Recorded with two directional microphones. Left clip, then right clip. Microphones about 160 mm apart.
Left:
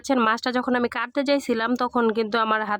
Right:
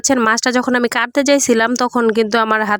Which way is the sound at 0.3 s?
30° right (ahead or behind).